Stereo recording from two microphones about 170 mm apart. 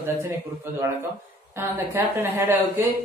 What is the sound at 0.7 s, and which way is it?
A man's voice, 15° right (ahead or behind).